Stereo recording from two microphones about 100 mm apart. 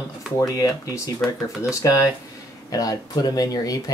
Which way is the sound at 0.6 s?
35° left (ahead or behind).